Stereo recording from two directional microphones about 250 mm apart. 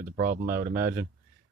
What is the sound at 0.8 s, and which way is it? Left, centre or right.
Speech, centre.